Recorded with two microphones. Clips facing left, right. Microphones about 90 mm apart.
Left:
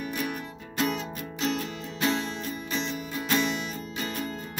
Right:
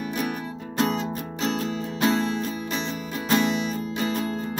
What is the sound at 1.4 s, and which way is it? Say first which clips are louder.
Music: right 3 dB; 40° right (ahead or behind).